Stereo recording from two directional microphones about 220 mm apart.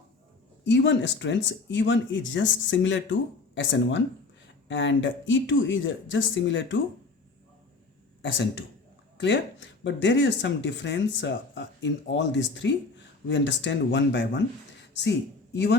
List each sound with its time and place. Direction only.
0.6 s speech: 50° left (ahead or behind)
8.2 s speech: 60° left (ahead or behind)